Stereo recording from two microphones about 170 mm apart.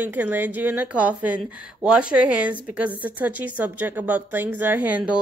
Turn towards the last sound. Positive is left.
turn(degrees=-10)  # may be behind; listen again after turning